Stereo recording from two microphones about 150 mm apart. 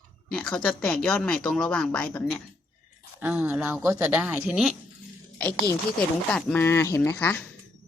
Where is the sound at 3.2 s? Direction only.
10° right (ahead or behind).